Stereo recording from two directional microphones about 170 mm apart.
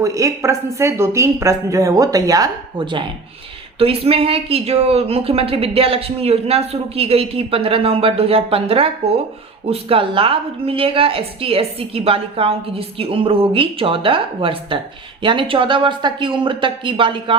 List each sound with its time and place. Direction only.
0.0 s speech: 20° right (ahead or behind)